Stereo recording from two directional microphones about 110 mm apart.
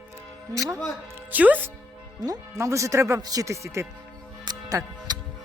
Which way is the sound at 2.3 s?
30° right (ahead or behind).